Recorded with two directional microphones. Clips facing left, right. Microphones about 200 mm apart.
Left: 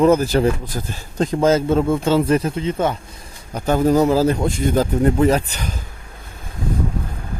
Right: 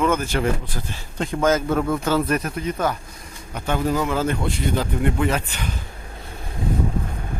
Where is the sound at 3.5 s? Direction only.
40° left (ahead or behind).